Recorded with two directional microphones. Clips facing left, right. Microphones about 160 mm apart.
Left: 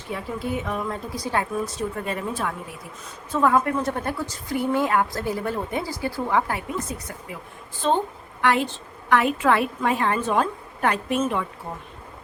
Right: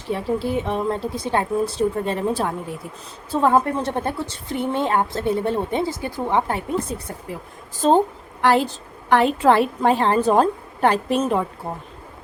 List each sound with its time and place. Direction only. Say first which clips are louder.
0.1 s a woman's voice: right 6 dB; 30° right (ahead or behind)